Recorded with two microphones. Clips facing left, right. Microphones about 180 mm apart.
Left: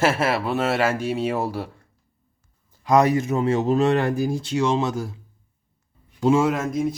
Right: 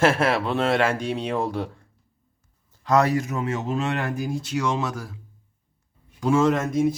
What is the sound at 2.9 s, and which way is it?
Speech, 15° left (ahead or behind).